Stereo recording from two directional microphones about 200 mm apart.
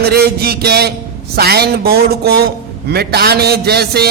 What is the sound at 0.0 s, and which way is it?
A woman's voice, 50° right (ahead or behind).